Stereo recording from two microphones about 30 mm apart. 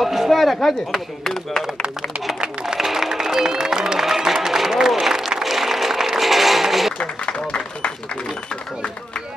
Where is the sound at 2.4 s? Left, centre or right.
Right.